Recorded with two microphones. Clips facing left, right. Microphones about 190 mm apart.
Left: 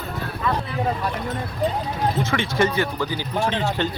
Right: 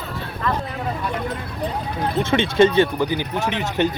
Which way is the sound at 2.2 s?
25° right (ahead or behind).